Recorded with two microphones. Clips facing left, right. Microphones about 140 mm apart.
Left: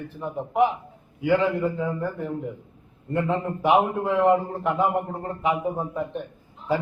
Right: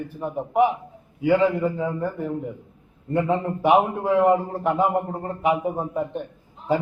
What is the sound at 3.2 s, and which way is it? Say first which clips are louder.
Speech: right 2 dB; 15° right (ahead or behind).